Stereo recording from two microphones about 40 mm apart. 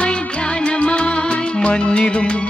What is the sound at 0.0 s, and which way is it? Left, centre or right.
Music, left.